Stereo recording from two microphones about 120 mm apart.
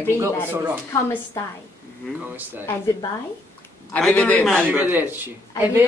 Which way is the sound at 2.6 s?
25° left (ahead or behind).